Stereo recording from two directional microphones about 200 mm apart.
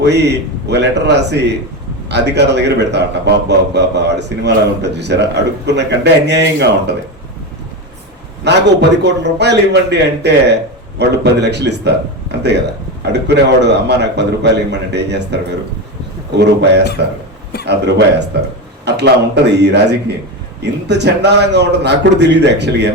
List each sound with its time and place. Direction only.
0.0 s a man's voice: 60° right (ahead or behind)
8.4 s a man's voice: 60° right (ahead or behind)
16.4 s a man's voice: 60° right (ahead or behind)